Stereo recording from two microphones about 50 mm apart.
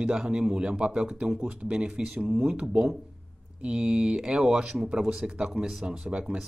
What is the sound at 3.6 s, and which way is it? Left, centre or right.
Speech, right.